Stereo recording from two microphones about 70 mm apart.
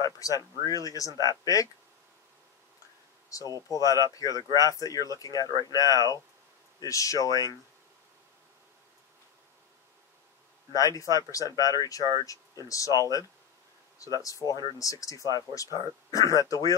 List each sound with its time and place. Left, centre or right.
0.0 s speech: left
3.3 s speech: left
10.7 s speech: left
14.2 s speech: left